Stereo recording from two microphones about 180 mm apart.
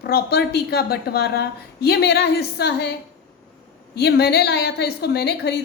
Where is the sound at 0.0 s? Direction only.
65° left (ahead or behind).